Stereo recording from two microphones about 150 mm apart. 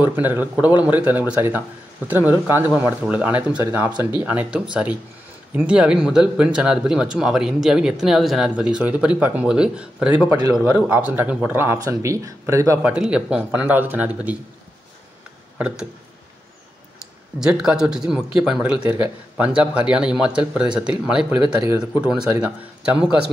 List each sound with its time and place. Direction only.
0.0 s speech: 15° right (ahead or behind)
12.9 s speech: 5° right (ahead or behind)
15.5 s a sound: 5° right (ahead or behind)
17.4 s speech: 5° right (ahead or behind)
21.5 s speech: 25° right (ahead or behind)
22.0 s speech: 5° right (ahead or behind)